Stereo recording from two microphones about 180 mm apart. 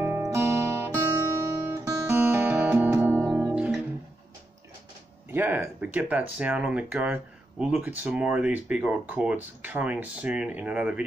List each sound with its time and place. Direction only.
0.0 s music: 15° right (ahead or behind)
5.3 s speech: 10° right (ahead or behind)